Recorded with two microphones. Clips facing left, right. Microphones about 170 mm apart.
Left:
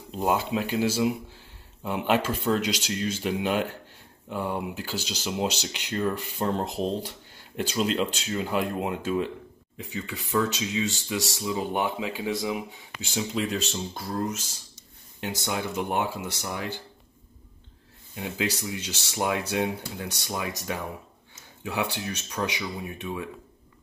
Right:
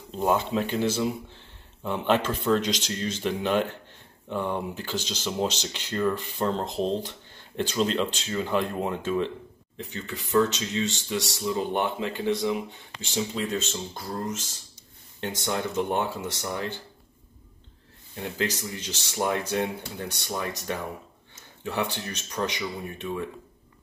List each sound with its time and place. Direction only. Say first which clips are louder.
0.1 s speech: right 1 dB; 5° left (ahead or behind)
18.1 s speech: even; 5° left (ahead or behind)